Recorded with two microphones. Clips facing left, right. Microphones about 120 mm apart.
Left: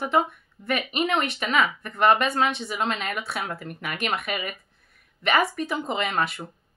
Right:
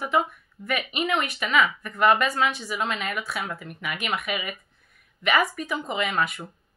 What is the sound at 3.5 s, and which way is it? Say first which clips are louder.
A woman's voice: left 1 dB; 40° left (ahead or behind).